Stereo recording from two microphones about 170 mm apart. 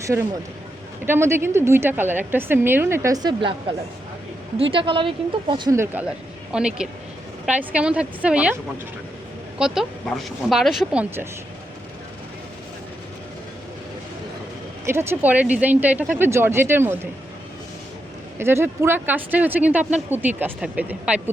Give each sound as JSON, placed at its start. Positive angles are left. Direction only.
{"t": 0.0, "sound": "a woman's voice", "side_deg": -20}
{"t": 5.7, "sound": "speech", "side_deg": -15}
{"t": 9.6, "sound": "speech", "side_deg": -5}
{"t": 14.8, "sound": "speech", "side_deg": -15}
{"t": 18.3, "sound": "speech", "side_deg": -15}